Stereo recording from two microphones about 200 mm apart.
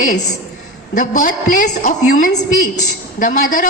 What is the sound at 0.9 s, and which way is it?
A woman's voice, 40° left (ahead or behind).